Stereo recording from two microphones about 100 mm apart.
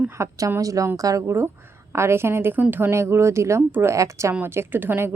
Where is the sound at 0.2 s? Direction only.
30° right (ahead or behind).